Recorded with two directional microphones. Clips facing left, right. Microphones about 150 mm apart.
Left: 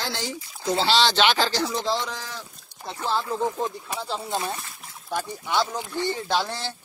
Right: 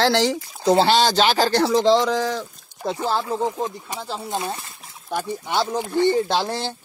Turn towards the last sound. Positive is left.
turn(degrees=-30)  # may be behind; listen again after turning